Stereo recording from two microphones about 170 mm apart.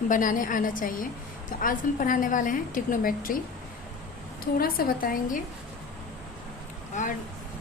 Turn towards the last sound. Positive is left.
turn(degrees=45)  # may be behind; listen again after turning